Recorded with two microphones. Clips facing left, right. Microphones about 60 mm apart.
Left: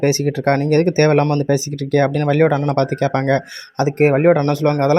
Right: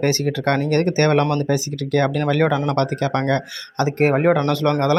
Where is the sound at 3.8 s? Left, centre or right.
Centre.